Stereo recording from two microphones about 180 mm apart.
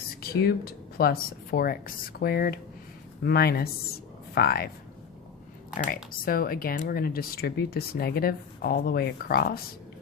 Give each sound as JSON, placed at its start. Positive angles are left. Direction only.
{"t": 0.2, "sound": "speech", "side_deg": 60}
{"t": 5.7, "sound": "speech", "side_deg": 50}